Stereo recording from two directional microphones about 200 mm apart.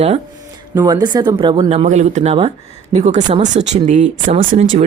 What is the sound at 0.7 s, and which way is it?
Speech, 20° right (ahead or behind).